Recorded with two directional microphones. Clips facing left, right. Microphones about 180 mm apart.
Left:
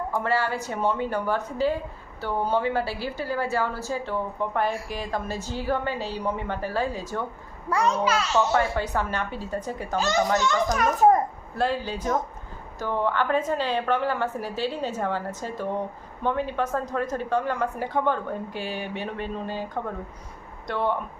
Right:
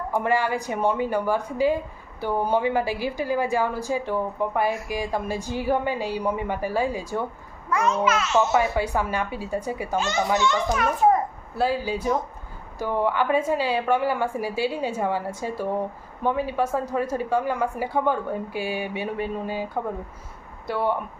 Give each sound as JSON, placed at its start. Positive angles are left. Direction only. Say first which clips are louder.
{"t": 0.1, "sound": "a woman's voice", "louder": "right 4 dB", "side_deg": -15}
{"t": 7.7, "sound": "a child's voice", "louder": "right 1 dB", "side_deg": 35}
{"t": 8.5, "sound": "a woman's voice", "louder": "right 2 dB", "side_deg": -10}
{"t": 10.3, "sound": "a child's voice", "louder": "right 1 dB", "side_deg": 40}
{"t": 11.5, "sound": "a woman's voice", "louder": "right 2 dB", "side_deg": -5}